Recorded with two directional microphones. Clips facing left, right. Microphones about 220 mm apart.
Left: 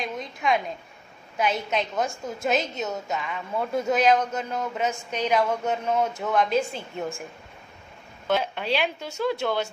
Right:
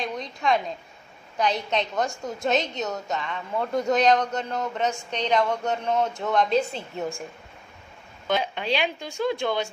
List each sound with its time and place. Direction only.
0.0 s a woman's voice: centre (ahead or behind)
8.3 s a woman's voice: 5° left (ahead or behind)